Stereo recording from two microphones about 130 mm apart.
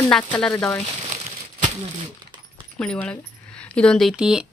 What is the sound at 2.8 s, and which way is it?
Speech, 10° left (ahead or behind).